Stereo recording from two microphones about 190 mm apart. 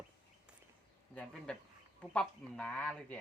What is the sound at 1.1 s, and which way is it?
Speech, 5° left (ahead or behind).